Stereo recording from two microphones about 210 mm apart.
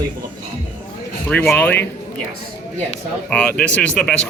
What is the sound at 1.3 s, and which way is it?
Speech, 5° left (ahead or behind).